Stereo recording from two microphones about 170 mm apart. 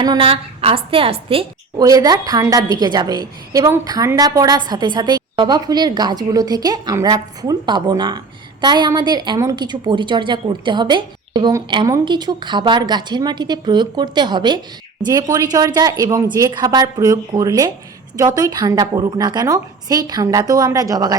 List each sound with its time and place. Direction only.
0.0 s a woman's voice: 25° right (ahead or behind)
1.8 s a woman's voice: 20° right (ahead or behind)